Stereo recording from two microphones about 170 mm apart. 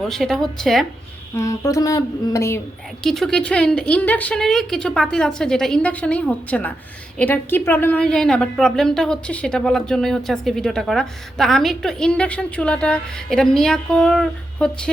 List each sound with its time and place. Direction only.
0.0 s a woman's voice: centre (ahead or behind)
1.4 s a sound: 20° left (ahead or behind)
3.0 s a woman's voice: centre (ahead or behind)